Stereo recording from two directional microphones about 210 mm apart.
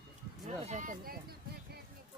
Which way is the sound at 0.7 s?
40° right (ahead or behind).